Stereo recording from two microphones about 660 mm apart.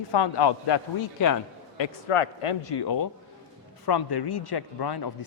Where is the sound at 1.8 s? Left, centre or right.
Left.